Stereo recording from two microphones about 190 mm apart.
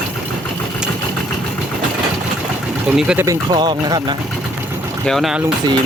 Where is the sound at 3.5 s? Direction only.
25° right (ahead or behind).